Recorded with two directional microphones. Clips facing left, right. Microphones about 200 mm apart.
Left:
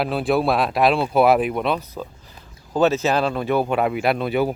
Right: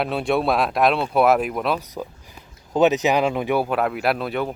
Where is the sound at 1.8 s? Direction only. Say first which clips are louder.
Right 1 dB; 15° right (ahead or behind).